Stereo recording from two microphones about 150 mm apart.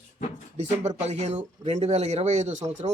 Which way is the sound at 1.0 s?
50° right (ahead or behind).